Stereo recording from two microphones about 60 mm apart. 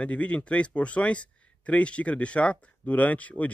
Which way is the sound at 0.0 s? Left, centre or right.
Left.